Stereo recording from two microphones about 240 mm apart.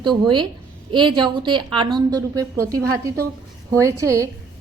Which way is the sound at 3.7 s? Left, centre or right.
Centre.